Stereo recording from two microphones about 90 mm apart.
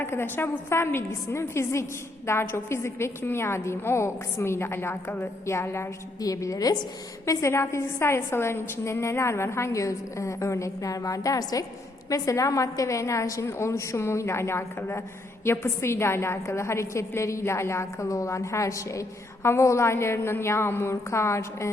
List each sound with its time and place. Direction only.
0.0 s a woman's voice: 25° left (ahead or behind)
6.1 s a woman's voice: 40° left (ahead or behind)